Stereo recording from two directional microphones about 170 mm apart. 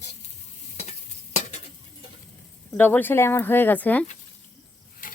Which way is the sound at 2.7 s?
10° left (ahead or behind).